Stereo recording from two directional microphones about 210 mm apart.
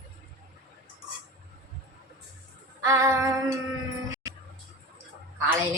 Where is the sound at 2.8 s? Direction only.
15° right (ahead or behind).